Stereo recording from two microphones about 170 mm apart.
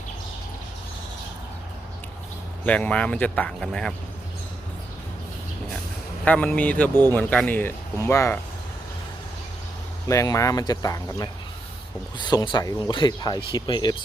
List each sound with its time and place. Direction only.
2.6 s speech: 5° left (ahead or behind)
6.2 s speech: 10° left (ahead or behind)
10.1 s speech: 20° left (ahead or behind)